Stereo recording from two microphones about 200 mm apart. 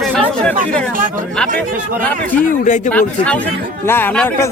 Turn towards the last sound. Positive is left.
turn(degrees=5)  # may be behind; listen again after turning